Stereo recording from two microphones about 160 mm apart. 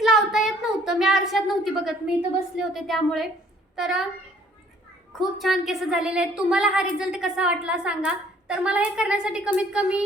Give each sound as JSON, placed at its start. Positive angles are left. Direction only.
{"t": 0.0, "sound": "a sound", "side_deg": 0}
{"t": 2.6, "sound": "a woman's voice", "side_deg": 0}
{"t": 5.1, "sound": "a woman's voice", "side_deg": 0}